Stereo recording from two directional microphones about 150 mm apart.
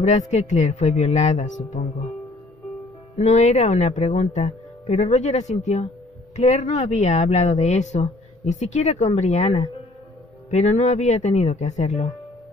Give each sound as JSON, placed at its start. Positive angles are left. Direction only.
{"t": 0.0, "sound": "speech", "side_deg": 50}
{"t": 3.2, "sound": "speech", "side_deg": 50}